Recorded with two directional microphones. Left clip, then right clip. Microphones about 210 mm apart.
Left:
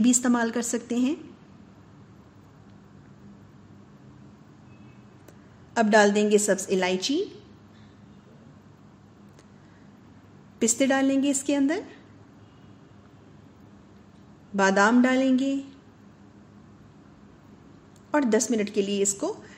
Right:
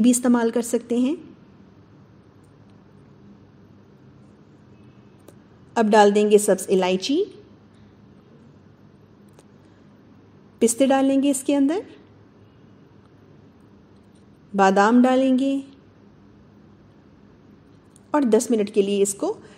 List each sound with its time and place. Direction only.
0.0 s a woman's voice: 15° right (ahead or behind)
5.8 s a woman's voice: 20° right (ahead or behind)
10.6 s a woman's voice: 20° right (ahead or behind)
14.5 s a woman's voice: 20° right (ahead or behind)
18.1 s a woman's voice: 20° right (ahead or behind)